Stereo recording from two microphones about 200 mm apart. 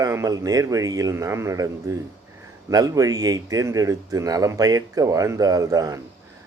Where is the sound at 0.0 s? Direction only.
15° right (ahead or behind).